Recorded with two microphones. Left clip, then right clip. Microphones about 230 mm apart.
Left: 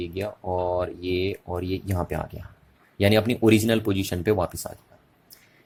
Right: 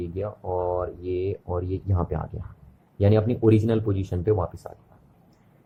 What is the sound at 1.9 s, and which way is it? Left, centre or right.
Speech, left.